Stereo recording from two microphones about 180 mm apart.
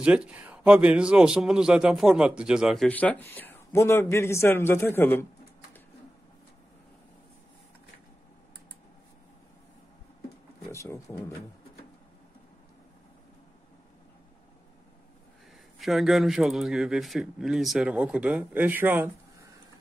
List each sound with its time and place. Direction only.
0.0 s a man's voice: 5° right (ahead or behind); by 5.2 s 10° left (ahead or behind)
10.7 s speech: 15° left (ahead or behind)
15.8 s a man's voice: centre (ahead or behind)